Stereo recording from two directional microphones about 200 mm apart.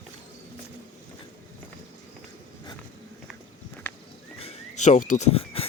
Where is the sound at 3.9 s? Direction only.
10° left (ahead or behind).